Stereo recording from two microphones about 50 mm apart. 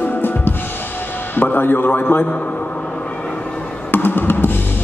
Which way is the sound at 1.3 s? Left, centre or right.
Left.